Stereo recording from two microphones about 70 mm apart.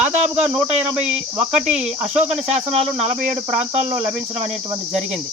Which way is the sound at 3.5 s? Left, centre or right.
Centre.